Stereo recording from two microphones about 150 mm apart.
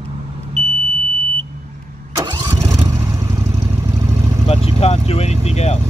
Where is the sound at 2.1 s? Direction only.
25° right (ahead or behind).